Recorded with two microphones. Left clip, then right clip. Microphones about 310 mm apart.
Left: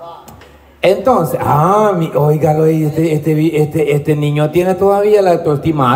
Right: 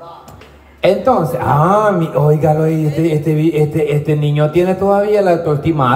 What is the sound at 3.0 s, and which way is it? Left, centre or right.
A man's voice, left.